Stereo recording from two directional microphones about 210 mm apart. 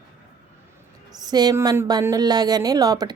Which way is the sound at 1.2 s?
20° right (ahead or behind).